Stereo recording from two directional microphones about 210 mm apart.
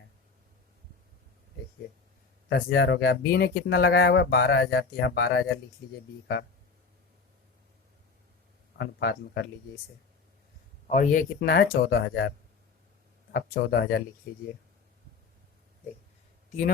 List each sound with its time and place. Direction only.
2.5 s speech: 50° left (ahead or behind)
8.8 s speech: 55° left (ahead or behind)
10.8 s a man's voice: 35° left (ahead or behind)
11.3 s speech: 50° left (ahead or behind)
13.3 s speech: 50° left (ahead or behind)